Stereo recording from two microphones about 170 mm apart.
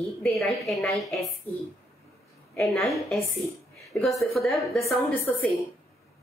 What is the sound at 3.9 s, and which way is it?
Speech, 10° left (ahead or behind).